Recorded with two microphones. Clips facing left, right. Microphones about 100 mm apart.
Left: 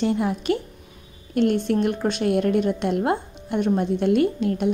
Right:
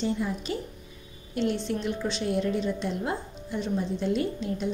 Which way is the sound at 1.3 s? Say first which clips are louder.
Left 8 dB; 55° left (ahead or behind).